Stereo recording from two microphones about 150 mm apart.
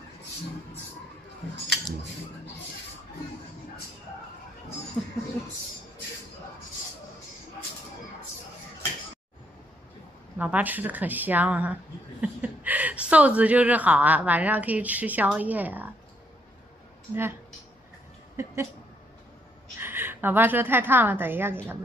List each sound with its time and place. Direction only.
10.3 s speech: 10° right (ahead or behind)
17.1 s speech: 15° right (ahead or behind)
19.8 s a woman's voice: 15° right (ahead or behind)